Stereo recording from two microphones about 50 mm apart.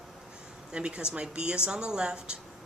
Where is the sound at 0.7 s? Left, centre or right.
Centre.